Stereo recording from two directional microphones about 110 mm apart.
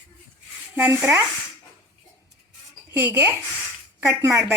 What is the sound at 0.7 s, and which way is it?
Speech, 20° right (ahead or behind).